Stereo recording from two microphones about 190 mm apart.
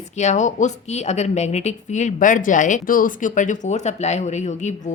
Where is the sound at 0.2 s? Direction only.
40° left (ahead or behind).